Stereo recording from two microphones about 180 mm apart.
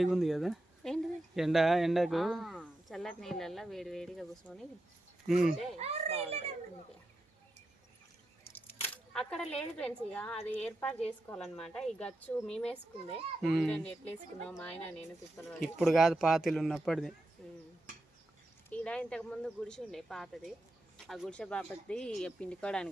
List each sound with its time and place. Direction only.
0.0 s speech: centre (ahead or behind)
5.7 s a child's voice: 35° right (ahead or behind)
8.9 s a woman's voice: 5° left (ahead or behind)
18.7 s speech: 5° left (ahead or behind)